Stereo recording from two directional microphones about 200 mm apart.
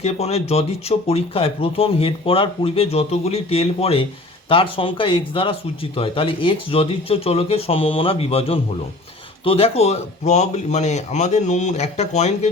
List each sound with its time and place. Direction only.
0.0 s speech: 30° left (ahead or behind)